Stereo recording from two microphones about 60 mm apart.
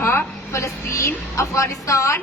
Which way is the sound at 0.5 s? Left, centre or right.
Left.